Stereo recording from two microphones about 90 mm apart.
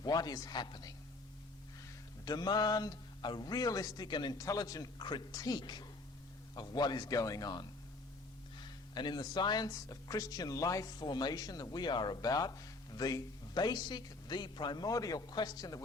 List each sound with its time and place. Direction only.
0.0 s speech: 45° left (ahead or behind)
2.2 s speech: 50° left (ahead or behind)